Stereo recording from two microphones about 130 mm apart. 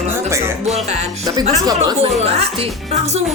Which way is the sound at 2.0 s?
55° right (ahead or behind).